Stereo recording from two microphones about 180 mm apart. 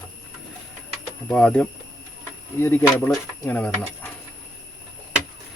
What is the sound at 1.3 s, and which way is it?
Speech, 5° left (ahead or behind).